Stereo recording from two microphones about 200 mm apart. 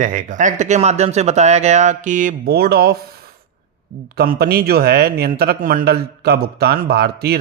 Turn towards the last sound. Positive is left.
turn(degrees=-55)  # may be behind; listen again after turning